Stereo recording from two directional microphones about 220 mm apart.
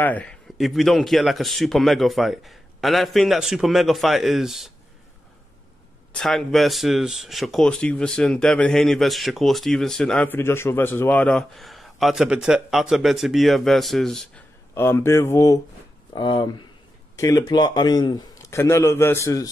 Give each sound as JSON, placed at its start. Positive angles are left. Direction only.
{"t": 0.0, "sound": "speech", "side_deg": 5}
{"t": 6.1, "sound": "a man's voice", "side_deg": 0}